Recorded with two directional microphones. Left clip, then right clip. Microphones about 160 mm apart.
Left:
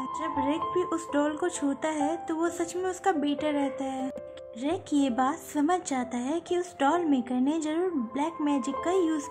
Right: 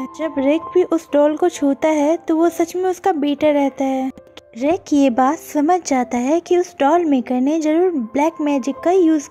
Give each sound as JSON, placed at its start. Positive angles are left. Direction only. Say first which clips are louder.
{"t": 0.2, "sound": "speech", "louder": "right 12 dB", "side_deg": -30}